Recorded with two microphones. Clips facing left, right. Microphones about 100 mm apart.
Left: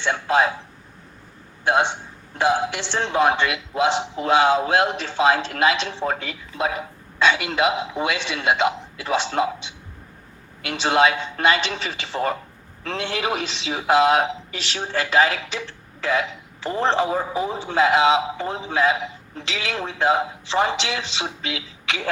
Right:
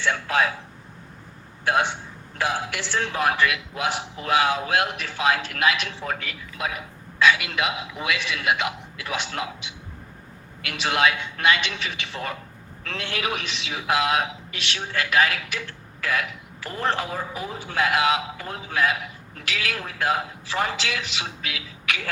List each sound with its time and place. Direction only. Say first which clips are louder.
0.0 s a man's voice: left 3 dB; 25° left (ahead or behind)
1.6 s a man's voice: left 3 dB; 25° left (ahead or behind)